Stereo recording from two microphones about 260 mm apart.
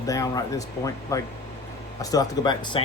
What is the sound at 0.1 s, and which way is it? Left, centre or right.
Speech, centre.